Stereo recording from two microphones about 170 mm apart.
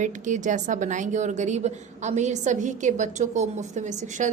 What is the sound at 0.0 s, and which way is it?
A woman's voice, 45° right (ahead or behind).